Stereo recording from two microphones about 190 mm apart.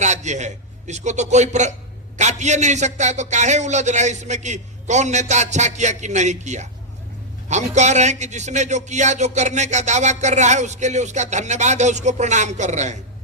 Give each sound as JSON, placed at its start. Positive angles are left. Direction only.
{"t": 0.0, "sound": "a man's voice", "side_deg": -40}